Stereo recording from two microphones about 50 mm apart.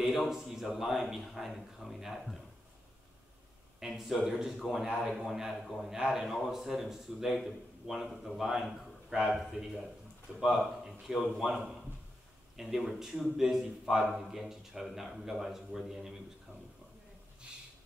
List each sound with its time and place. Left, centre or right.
0.0 s a man's voice: centre
3.8 s a man's voice: centre
4.8 s a man's voice: centre
17.4 s a sound: right